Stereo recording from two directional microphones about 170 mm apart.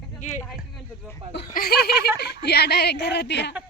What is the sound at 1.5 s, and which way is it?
Speech, 65° left (ahead or behind).